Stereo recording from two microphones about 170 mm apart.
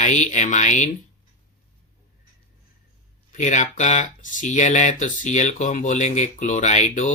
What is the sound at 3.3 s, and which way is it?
Speech, 45° left (ahead or behind).